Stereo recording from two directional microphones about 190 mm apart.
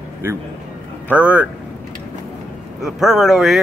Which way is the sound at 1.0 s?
5° right (ahead or behind).